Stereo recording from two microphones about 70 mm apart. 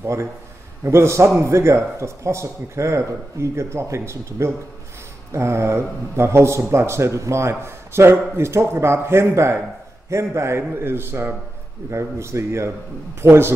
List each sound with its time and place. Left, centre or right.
0.0 s a man's voice: right